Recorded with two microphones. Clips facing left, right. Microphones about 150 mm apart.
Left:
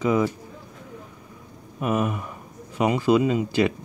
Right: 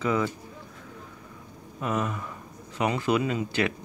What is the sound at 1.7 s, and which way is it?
Speech, 15° left (ahead or behind).